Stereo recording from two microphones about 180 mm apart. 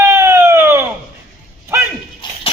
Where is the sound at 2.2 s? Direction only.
25° left (ahead or behind).